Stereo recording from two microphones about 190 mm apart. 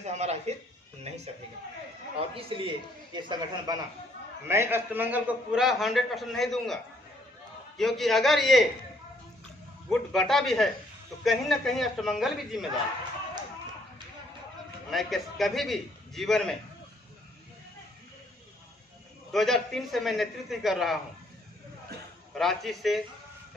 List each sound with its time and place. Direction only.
0.0 s speech: 35° right (ahead or behind)
2.5 s speech: 25° right (ahead or behind)
4.4 s a man's voice: 15° right (ahead or behind)
7.8 s a man's voice: centre (ahead or behind)
9.9 s a man's voice: centre (ahead or behind)
14.8 s a man's voice: centre (ahead or behind)
19.3 s a man's voice: centre (ahead or behind)
22.4 s a man's voice: centre (ahead or behind)